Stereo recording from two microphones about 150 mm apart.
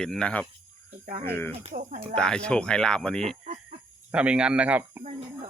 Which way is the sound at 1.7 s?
60° right (ahead or behind).